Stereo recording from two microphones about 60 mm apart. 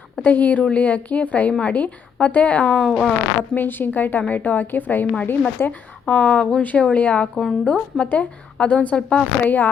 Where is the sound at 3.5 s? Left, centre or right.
Left.